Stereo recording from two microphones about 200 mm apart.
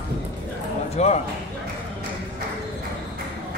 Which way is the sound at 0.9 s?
35° left (ahead or behind).